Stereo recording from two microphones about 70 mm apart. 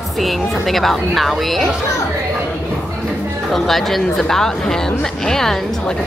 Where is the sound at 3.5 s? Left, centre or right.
Centre.